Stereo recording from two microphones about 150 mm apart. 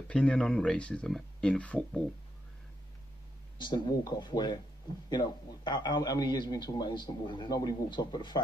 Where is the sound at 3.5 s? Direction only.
30° left (ahead or behind).